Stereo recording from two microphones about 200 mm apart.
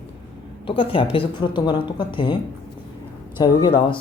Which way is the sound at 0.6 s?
25° left (ahead or behind).